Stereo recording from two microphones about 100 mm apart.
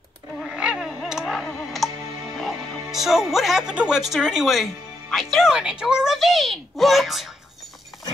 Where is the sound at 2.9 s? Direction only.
5° right (ahead or behind).